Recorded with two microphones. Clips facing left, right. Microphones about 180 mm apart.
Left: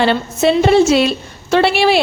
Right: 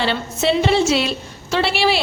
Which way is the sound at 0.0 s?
50° left (ahead or behind).